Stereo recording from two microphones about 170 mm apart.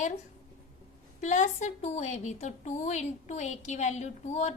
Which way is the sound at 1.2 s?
45° left (ahead or behind).